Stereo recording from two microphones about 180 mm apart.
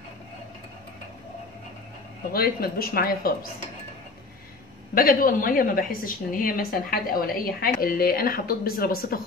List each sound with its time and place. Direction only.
2.3 s speech: 55° left (ahead or behind)
4.9 s a woman's voice: 50° left (ahead or behind)